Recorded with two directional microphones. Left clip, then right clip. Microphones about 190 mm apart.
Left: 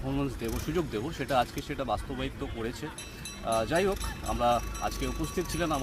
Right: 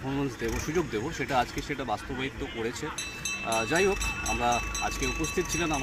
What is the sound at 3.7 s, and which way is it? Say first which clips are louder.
Speech: right 3 dB; 25° left (ahead or behind).